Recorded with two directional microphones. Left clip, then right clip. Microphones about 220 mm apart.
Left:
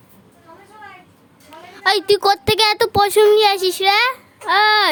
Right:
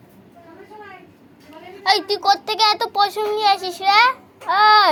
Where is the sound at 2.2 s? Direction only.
60° left (ahead or behind).